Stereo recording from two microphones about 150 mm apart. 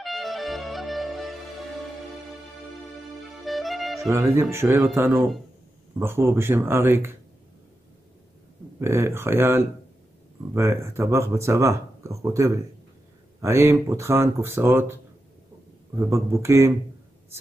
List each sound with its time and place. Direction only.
0.0 s music: centre (ahead or behind)
3.3 s music: centre (ahead or behind)
4.1 s speech: 20° right (ahead or behind)
5.9 s speech: 15° right (ahead or behind)
8.7 s a man's voice: 15° right (ahead or behind)